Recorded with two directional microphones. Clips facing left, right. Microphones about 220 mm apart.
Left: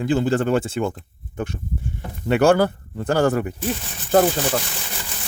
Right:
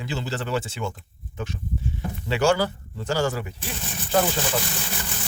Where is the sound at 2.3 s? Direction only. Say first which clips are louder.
Left 6 dB; 55° left (ahead or behind).